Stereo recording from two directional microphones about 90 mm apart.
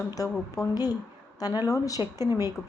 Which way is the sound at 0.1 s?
40° left (ahead or behind).